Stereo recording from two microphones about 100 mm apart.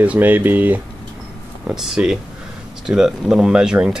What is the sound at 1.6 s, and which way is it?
Speech, 5° right (ahead or behind).